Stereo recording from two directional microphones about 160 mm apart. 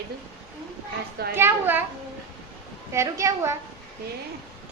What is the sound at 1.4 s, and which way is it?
Speech, 15° right (ahead or behind).